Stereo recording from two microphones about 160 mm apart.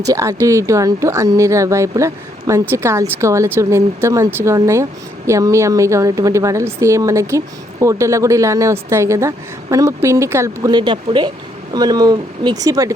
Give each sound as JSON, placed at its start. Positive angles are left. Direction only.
{"t": 0.0, "sound": "speech", "side_deg": -20}